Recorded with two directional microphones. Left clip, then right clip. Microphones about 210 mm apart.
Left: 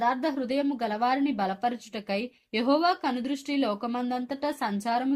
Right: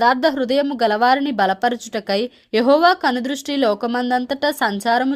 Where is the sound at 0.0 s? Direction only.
55° right (ahead or behind).